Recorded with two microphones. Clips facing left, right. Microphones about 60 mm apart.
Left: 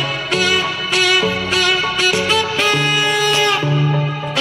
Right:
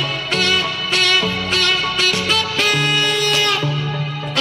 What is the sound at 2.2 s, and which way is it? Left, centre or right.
Music, centre.